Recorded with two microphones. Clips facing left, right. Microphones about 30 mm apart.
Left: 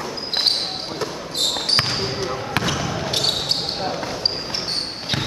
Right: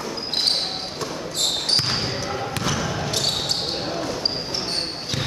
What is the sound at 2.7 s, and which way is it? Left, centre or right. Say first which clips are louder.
Basketball bounce: left 1 dB; centre.